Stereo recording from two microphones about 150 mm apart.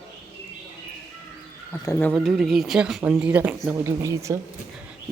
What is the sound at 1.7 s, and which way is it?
Speech, 20° left (ahead or behind).